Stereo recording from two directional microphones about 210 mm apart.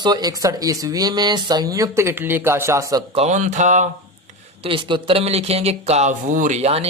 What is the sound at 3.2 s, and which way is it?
Speech, 35° right (ahead or behind).